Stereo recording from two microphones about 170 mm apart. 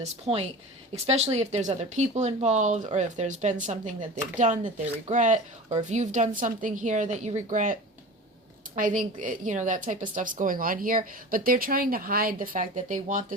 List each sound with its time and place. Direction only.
0.0 s a woman's voice: 35° right (ahead or behind)